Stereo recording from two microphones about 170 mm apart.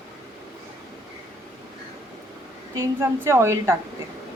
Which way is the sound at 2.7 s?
15° right (ahead or behind).